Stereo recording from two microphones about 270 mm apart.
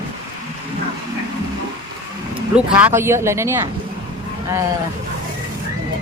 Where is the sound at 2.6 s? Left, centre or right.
Centre.